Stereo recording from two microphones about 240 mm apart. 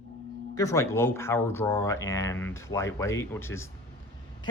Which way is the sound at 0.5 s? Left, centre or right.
Centre.